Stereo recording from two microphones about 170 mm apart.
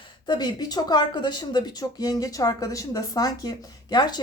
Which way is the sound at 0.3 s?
25° left (ahead or behind).